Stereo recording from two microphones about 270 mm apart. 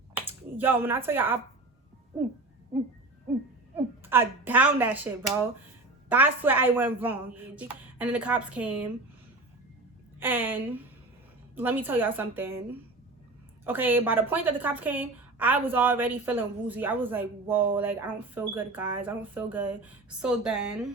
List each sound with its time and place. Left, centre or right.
0.1 s speech: centre
4.1 s a woman's voice: centre
10.2 s a woman's voice: centre
13.7 s a woman's voice: centre